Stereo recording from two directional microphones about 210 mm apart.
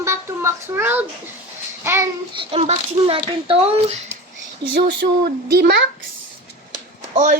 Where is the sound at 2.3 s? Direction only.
25° right (ahead or behind).